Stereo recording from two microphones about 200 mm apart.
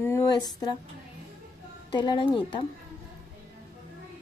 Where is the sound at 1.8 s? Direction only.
25° left (ahead or behind).